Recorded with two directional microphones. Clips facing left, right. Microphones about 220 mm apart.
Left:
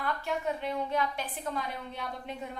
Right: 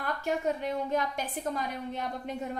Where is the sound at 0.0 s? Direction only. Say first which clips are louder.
Right 2 dB; 45° right (ahead or behind).